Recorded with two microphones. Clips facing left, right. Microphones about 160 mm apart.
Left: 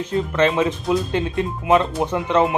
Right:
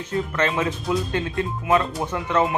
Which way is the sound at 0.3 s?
20° left (ahead or behind).